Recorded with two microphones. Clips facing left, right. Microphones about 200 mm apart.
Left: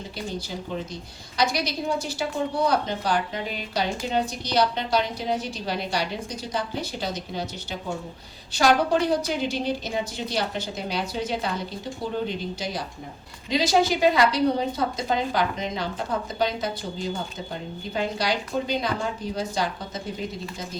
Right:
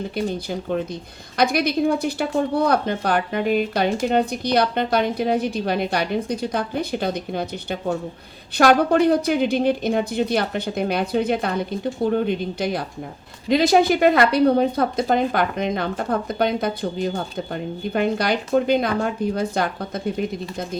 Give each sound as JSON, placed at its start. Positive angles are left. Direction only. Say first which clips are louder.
{"t": 0.3, "sound": "speech", "louder": "right 7 dB", "side_deg": -60}